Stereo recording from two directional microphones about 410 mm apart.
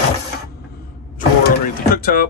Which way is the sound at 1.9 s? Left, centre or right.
Left.